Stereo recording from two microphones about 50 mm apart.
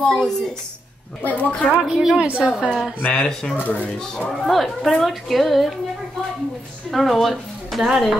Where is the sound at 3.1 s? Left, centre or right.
Centre.